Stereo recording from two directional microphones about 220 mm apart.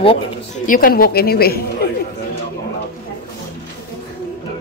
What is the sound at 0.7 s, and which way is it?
Speech, 40° left (ahead or behind).